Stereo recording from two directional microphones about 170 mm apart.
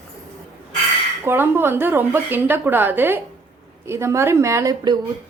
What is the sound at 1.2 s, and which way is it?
Speech, 10° right (ahead or behind).